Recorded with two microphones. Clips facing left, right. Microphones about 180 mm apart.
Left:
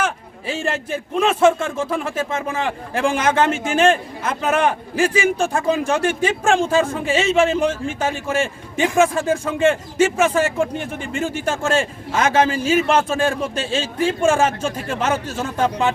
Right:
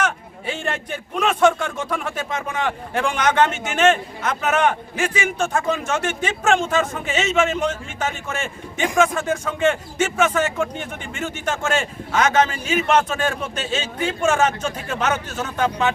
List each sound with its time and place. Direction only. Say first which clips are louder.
0.0 s speech: even; 30° left (ahead or behind)